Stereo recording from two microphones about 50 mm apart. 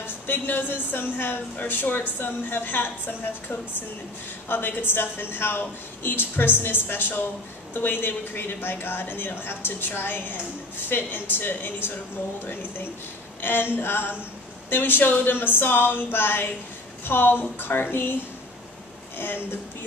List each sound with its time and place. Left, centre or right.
0.0 s a woman's voice: left
13.4 s a woman's voice: left
19.1 s a woman's voice: left